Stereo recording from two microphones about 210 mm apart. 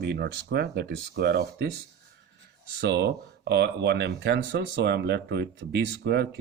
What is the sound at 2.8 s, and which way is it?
Speech, 55° right (ahead or behind).